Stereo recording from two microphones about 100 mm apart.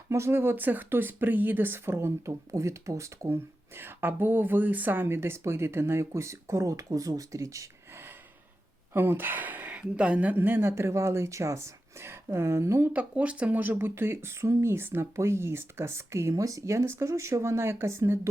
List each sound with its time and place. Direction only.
0.1 s speech: 25° right (ahead or behind)
8.9 s speech: 25° right (ahead or behind)